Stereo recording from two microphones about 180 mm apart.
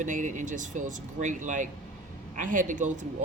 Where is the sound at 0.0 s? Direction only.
45° right (ahead or behind).